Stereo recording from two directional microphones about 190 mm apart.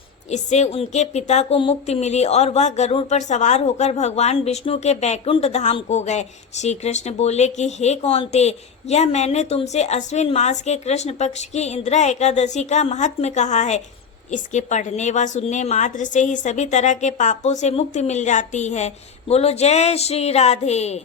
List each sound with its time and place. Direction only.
0.3 s speech: 35° left (ahead or behind)